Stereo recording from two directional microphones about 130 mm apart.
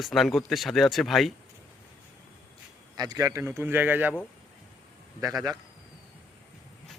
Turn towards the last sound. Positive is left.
turn(degrees=-25)  # may be behind; listen again after turning